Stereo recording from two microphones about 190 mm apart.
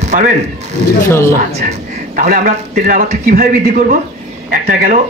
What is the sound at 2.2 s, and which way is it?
A man's voice, 40° right (ahead or behind).